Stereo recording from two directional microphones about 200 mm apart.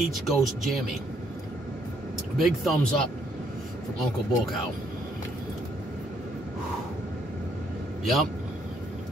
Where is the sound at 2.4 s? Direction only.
Centre (ahead or behind).